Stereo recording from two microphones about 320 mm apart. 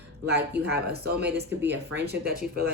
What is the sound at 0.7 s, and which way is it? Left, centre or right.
Speech, right.